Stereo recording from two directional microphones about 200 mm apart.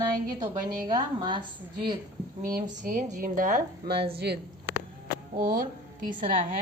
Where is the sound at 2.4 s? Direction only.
45° right (ahead or behind).